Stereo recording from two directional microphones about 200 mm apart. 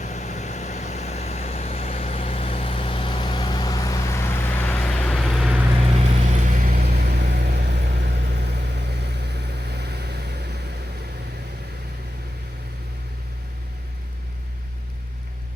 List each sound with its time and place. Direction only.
0.0 s vehicle: 35° left (ahead or behind); by 5.5 s centre (ahead or behind)
6.4 s vehicle: 45° right (ahead or behind)